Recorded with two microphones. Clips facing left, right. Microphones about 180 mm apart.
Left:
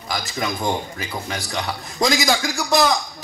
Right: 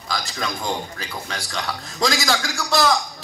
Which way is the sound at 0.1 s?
20° left (ahead or behind).